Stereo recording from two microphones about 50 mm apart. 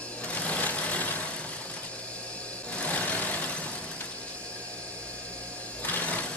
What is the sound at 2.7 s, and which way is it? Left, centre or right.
Vehicle, left.